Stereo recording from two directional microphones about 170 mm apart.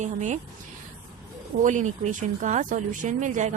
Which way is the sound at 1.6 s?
45° right (ahead or behind).